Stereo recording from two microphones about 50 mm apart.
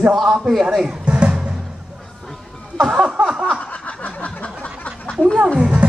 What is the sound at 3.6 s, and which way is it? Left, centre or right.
Snicker, left.